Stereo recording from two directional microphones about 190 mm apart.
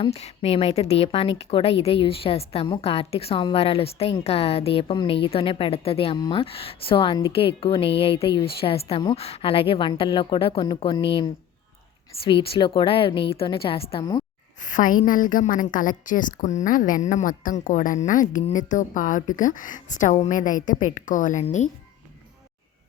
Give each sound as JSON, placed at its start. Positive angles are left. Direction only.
{"t": 0.0, "sound": "a woman's voice", "side_deg": 35}
{"t": 14.6, "sound": "a woman's voice", "side_deg": 45}